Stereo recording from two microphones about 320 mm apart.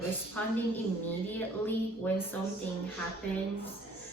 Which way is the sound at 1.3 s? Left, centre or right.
Centre.